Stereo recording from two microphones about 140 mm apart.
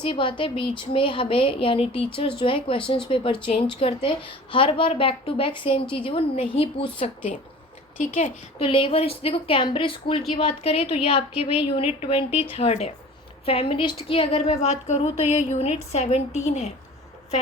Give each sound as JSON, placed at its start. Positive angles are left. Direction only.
{"t": 0.0, "sound": "a woman's voice", "side_deg": 35}
{"t": 7.9, "sound": "a woman's voice", "side_deg": 65}
{"t": 8.5, "sound": "a woman's voice", "side_deg": 40}